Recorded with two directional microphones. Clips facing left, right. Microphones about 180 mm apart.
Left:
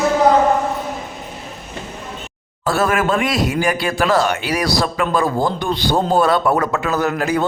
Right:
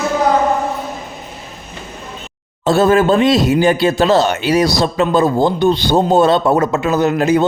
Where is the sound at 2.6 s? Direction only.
25° right (ahead or behind).